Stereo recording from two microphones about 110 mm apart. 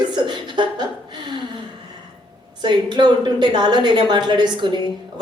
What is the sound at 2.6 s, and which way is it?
A woman's voice, 45° right (ahead or behind).